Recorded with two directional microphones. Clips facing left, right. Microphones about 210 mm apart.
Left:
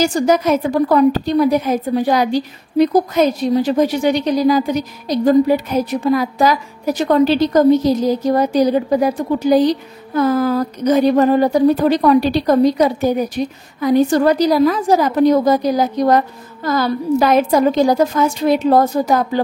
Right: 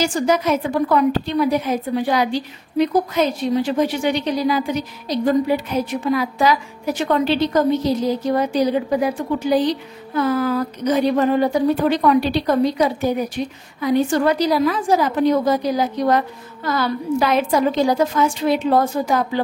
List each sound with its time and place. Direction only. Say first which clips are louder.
0.0 s a woman's voice: left 4 dB; 45° left (ahead or behind)